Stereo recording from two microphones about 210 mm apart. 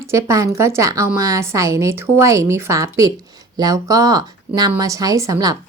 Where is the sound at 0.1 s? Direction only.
15° right (ahead or behind).